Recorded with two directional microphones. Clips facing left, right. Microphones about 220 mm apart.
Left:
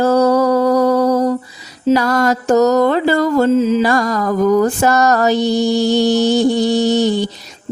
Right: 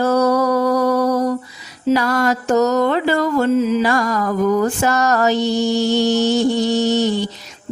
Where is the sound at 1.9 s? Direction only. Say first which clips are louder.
Left 3 dB; 40° left (ahead or behind).